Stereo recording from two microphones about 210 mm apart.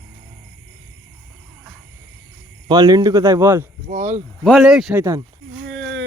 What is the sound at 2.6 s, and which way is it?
Speech, 20° right (ahead or behind).